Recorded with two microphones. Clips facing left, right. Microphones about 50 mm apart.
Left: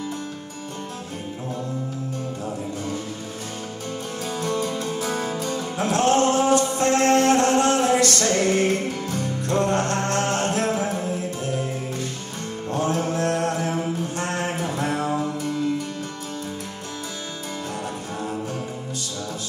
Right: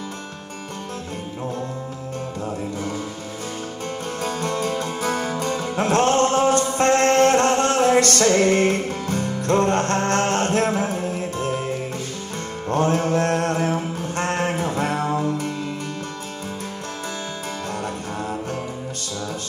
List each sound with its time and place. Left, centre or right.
4.2 s music: right
12.6 s music: right
14.1 s a sound: right